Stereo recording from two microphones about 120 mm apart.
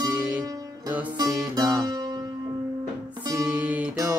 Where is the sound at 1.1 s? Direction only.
30° right (ahead or behind).